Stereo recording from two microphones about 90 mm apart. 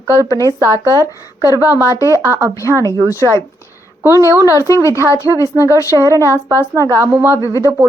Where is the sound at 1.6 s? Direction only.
35° left (ahead or behind).